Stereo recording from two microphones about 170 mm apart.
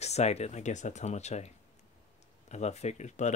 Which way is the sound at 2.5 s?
40° left (ahead or behind).